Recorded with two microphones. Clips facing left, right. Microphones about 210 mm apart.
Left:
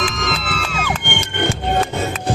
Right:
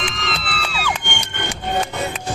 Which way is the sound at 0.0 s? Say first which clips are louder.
Left 4 dB; 45° left (ahead or behind).